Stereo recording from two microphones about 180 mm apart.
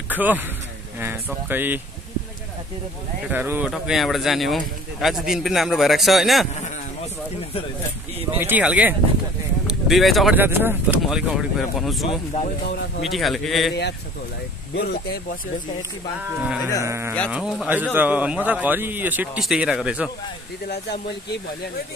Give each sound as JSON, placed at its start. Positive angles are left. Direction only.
{"t": 0.1, "sound": "speech", "side_deg": -10}
{"t": 3.3, "sound": "a man's voice", "side_deg": -10}
{"t": 8.4, "sound": "speech", "side_deg": -10}
{"t": 10.3, "sound": "a man's voice", "side_deg": -10}
{"t": 14.8, "sound": "speech", "side_deg": 60}
{"t": 16.3, "sound": "speech", "side_deg": -10}
{"t": 17.3, "sound": "a man's voice", "side_deg": -5}
{"t": 20.6, "sound": "speech", "side_deg": 60}